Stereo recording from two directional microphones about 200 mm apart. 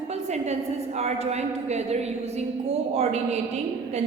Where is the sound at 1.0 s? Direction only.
35° right (ahead or behind).